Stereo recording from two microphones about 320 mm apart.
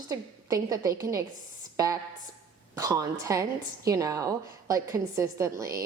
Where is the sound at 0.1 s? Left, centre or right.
Centre.